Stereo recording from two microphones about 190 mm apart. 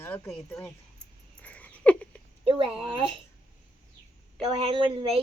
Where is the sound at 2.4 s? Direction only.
30° right (ahead or behind).